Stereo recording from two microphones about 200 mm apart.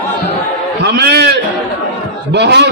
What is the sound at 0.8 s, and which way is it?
A man's voice, 55° right (ahead or behind).